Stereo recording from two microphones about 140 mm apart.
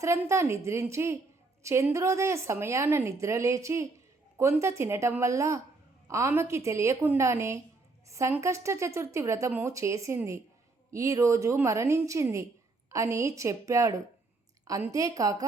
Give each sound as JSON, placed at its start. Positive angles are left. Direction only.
{"t": 0.0, "sound": "speech", "side_deg": -20}